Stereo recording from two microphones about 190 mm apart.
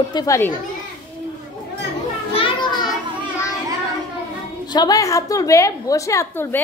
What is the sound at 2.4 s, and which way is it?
Children playing, 25° left (ahead or behind).